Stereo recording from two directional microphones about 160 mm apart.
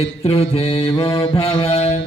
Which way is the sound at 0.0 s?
40° left (ahead or behind).